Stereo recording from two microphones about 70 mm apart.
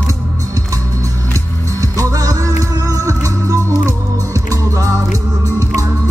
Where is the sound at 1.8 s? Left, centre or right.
Right.